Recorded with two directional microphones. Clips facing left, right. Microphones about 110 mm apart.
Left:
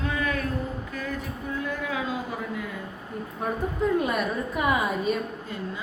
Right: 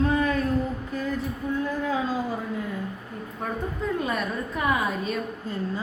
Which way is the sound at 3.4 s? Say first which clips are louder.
Left 3 dB; 5° left (ahead or behind).